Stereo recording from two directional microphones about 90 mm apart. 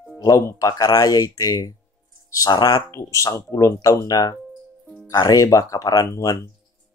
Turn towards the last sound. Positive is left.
turn(degrees=35)  # may be behind; listen again after turning